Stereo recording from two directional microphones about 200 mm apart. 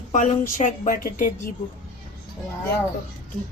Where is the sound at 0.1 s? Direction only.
40° left (ahead or behind).